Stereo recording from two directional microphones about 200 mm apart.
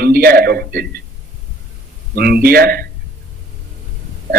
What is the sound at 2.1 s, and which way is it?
Speech, 50° right (ahead or behind).